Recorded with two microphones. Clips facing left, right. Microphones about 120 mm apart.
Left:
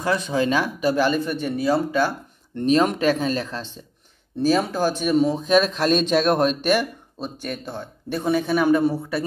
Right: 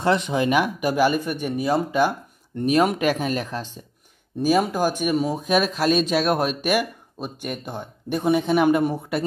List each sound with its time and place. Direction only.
0.0 s speech: 20° right (ahead or behind)